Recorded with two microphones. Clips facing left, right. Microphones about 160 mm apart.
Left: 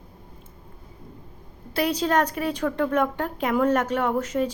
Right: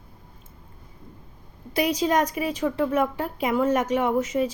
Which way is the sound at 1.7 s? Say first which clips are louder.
Right 1 dB; 10° right (ahead or behind).